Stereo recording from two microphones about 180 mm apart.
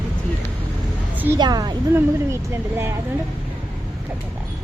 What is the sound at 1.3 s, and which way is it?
Speech, 20° right (ahead or behind).